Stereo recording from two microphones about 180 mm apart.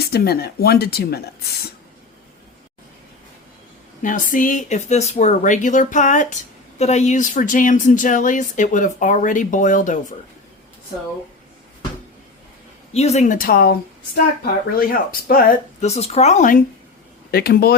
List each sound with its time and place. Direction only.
0.0 s speech: 60° left (ahead or behind)
4.0 s speech: 50° left (ahead or behind)
12.9 s speech: 35° left (ahead or behind); by 13.7 s 55° left (ahead or behind)
14.8 s speech: 50° left (ahead or behind)
17.3 s speech: 60° left (ahead or behind)